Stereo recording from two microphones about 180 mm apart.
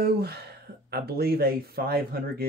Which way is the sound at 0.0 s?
60° right (ahead or behind).